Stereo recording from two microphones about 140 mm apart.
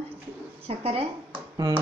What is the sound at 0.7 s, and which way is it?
Speech, 45° right (ahead or behind).